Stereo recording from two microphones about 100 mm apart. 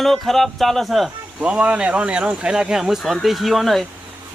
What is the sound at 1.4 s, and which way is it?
Speech, 10° right (ahead or behind).